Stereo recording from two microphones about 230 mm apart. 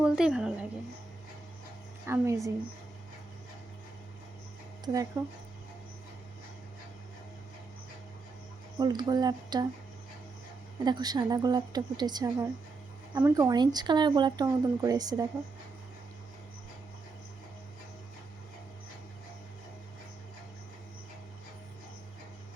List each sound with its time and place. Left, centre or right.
0.0 s a woman's voice: centre
2.0 s speech: centre
4.9 s speech: centre
8.8 s speech: centre
10.8 s speech: centre